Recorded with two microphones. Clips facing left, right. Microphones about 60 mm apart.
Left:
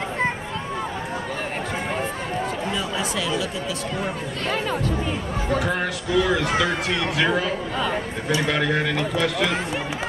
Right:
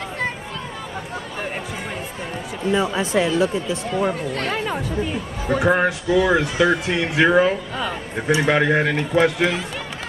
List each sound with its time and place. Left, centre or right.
2.7 s speech: right
4.6 s speech: centre
5.6 s speech: right